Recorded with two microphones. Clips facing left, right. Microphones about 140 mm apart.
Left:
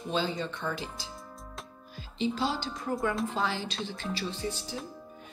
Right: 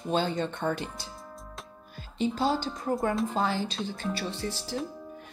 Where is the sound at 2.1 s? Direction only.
50° right (ahead or behind); by 4.7 s 70° right (ahead or behind).